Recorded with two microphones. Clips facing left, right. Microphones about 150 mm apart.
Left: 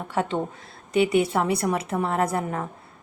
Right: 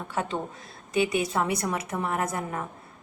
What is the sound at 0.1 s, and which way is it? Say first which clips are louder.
A woman's voice: left 5 dB; 25° left (ahead or behind).